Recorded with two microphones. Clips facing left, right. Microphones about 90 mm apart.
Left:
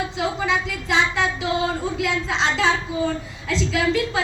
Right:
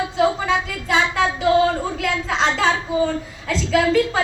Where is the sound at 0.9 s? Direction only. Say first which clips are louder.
Right 2 dB; 50° right (ahead or behind).